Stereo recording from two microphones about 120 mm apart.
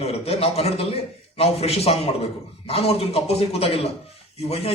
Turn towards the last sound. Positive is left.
turn(degrees=55)  # may be behind; listen again after turning